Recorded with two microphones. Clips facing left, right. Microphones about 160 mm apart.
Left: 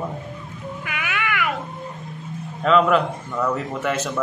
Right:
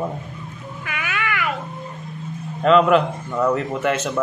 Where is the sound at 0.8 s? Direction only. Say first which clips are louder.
Right 1 dB; 15° left (ahead or behind).